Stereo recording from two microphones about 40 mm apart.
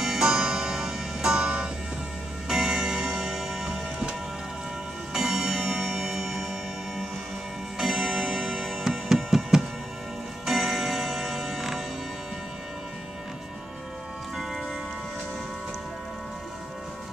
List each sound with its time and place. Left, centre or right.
0.2 s music: centre
2.4 s tick-tock: centre
5.1 s music: centre
7.8 s music: centre
10.4 s tick-tock: centre
14.3 s music: centre